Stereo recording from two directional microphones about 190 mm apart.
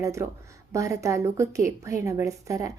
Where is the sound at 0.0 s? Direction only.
15° right (ahead or behind).